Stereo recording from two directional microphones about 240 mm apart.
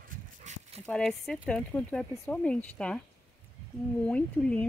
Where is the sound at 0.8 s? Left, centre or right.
Centre.